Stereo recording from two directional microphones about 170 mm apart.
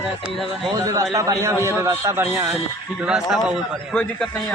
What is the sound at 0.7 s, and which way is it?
A man's voice, 20° right (ahead or behind).